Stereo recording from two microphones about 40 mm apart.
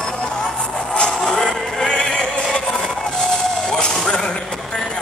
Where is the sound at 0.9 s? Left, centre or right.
Left.